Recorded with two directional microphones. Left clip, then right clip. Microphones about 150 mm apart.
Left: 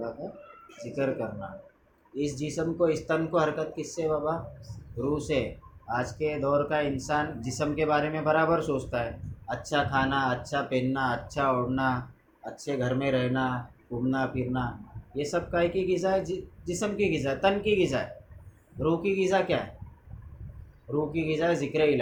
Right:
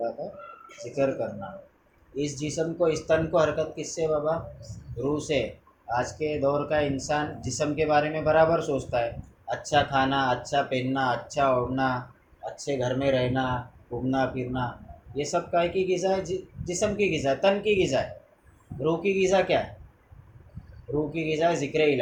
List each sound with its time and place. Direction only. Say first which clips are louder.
0.8 s speech: right 4 dB; 65° left (ahead or behind)
2.1 s speech: right 2 dB; 65° left (ahead or behind)
5.1 s speech: right 2 dB; 65° left (ahead or behind)
21.1 s speech: right 3 dB; 60° left (ahead or behind)